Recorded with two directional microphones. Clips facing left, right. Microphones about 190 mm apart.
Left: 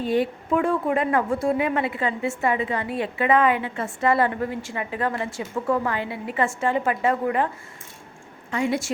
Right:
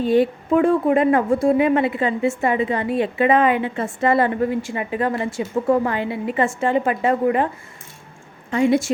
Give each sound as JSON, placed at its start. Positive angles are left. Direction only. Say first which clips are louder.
{"t": 0.0, "sound": "a woman's voice", "louder": "right 6 dB", "side_deg": -30}